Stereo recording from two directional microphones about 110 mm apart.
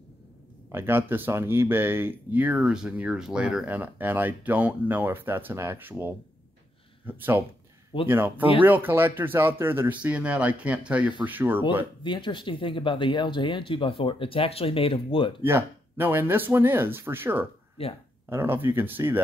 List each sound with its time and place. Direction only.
0.7 s speech: 20° right (ahead or behind)
12.0 s speech: 45° left (ahead or behind)
15.4 s speech: 20° right (ahead or behind)
17.8 s speech: 60° left (ahead or behind)
18.3 s speech: 20° right (ahead or behind)